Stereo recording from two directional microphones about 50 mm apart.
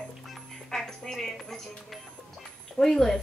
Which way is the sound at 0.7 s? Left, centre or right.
Centre.